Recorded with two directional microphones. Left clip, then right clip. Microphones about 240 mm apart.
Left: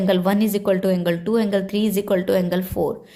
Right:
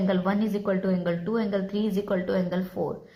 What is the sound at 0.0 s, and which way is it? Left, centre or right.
A woman's voice, left.